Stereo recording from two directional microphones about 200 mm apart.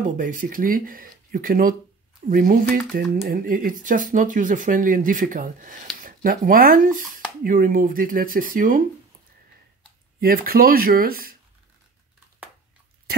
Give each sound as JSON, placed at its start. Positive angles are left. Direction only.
{"t": 0.2, "sound": "speech", "side_deg": -45}
{"t": 10.2, "sound": "speech", "side_deg": -45}